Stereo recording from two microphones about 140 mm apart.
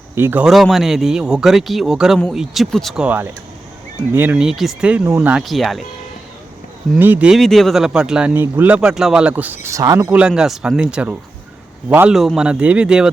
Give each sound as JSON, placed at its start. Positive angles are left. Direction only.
{"t": 0.2, "sound": "speech", "side_deg": -15}
{"t": 0.4, "sound": "speech", "side_deg": 0}
{"t": 5.4, "sound": "speech", "side_deg": 0}
{"t": 7.0, "sound": "speech", "side_deg": -10}
{"t": 10.1, "sound": "speech", "side_deg": -5}
{"t": 12.1, "sound": "speech", "side_deg": 0}